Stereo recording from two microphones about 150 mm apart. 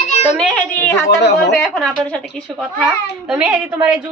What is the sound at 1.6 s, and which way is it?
A child's voice, 5° left (ahead or behind).